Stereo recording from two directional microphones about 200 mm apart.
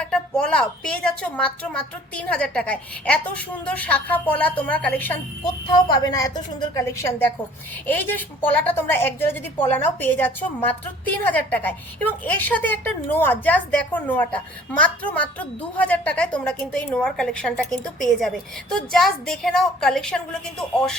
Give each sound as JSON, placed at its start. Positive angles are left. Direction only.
{"t": 0.0, "sound": "a woman's voice", "side_deg": 5}
{"t": 5.7, "sound": "a woman's voice", "side_deg": 20}